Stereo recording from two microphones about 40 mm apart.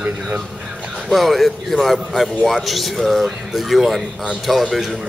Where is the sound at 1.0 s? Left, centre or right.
Centre.